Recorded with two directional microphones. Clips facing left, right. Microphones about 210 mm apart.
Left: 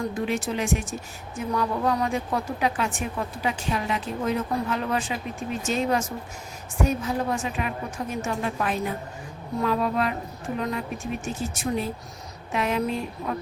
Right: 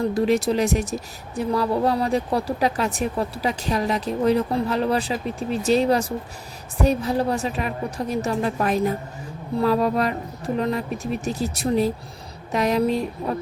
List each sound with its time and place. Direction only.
0.1 s a woman's voice: 40° right (ahead or behind)